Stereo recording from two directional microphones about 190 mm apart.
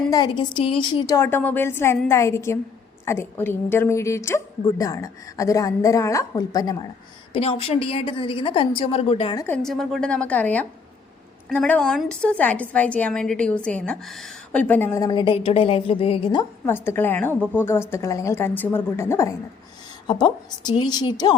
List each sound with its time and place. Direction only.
0.1 s a woman's voice: 20° left (ahead or behind)
7.3 s a woman's voice: 30° left (ahead or behind)
9.5 s a woman's voice: centre (ahead or behind); by 16.5 s 25° left (ahead or behind)
16.6 s a woman's voice: 10° left (ahead or behind)